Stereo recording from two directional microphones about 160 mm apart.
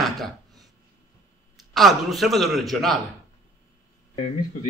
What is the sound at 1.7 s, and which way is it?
Speech, centre (ahead or behind).